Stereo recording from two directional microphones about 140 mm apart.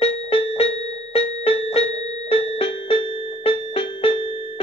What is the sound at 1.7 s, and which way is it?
Music, 45° left (ahead or behind).